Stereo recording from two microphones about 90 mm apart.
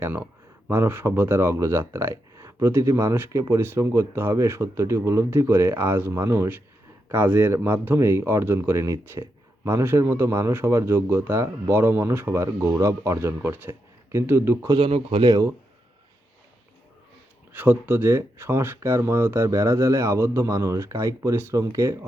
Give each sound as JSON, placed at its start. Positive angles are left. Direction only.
{"t": 0.0, "sound": "speech", "side_deg": -20}
{"t": 14.8, "sound": "speech", "side_deg": -85}
{"t": 15.3, "sound": "speech", "side_deg": -45}
{"t": 17.5, "sound": "speech", "side_deg": -20}